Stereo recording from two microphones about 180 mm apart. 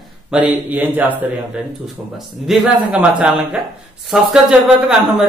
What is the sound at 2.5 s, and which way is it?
Speech, 5° right (ahead or behind).